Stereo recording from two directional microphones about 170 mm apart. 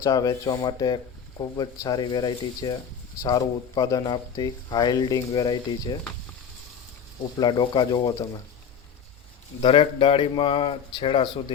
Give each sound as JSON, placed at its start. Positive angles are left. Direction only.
{"t": 0.0, "sound": "speech", "side_deg": 20}
{"t": 7.3, "sound": "speech", "side_deg": 25}
{"t": 9.6, "sound": "a man's voice", "side_deg": 35}